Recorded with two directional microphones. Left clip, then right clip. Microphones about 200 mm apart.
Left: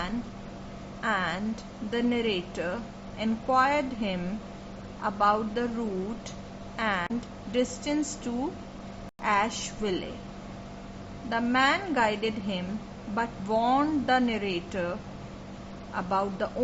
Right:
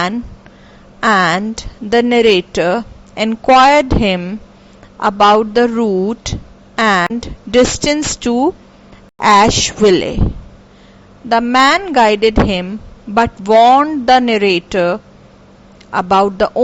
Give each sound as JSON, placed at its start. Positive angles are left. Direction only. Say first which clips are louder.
{"t": 1.0, "sound": "a woman's voice", "louder": "right 17 dB", "side_deg": -55}
{"t": 11.3, "sound": "a woman's voice", "louder": "right 15 dB", "side_deg": -50}